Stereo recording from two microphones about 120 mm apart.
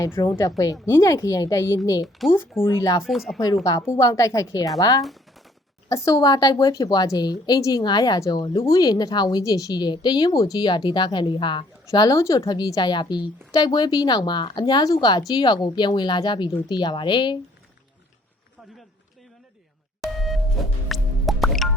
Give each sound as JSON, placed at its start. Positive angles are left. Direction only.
{"t": 0.0, "sound": "a woman's voice", "side_deg": 20}
{"t": 2.2, "sound": "speech", "side_deg": 0}
{"t": 2.6, "sound": "a woman's voice", "side_deg": 25}
{"t": 3.0, "sound": "speech", "side_deg": 0}
{"t": 3.4, "sound": "a woman's voice", "side_deg": 30}
{"t": 11.9, "sound": "a woman's voice", "side_deg": 30}
{"t": 20.1, "sound": "music", "side_deg": 0}